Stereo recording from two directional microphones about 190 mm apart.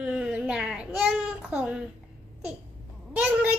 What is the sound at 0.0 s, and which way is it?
Babbling, 5° right (ahead or behind).